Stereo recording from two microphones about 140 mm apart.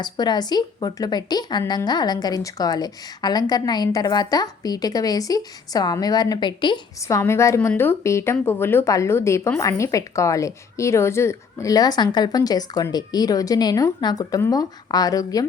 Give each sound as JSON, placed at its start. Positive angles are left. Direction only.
{"t": 0.0, "sound": "a woman's voice", "side_deg": 30}
{"t": 7.1, "sound": "a woman's voice", "side_deg": 20}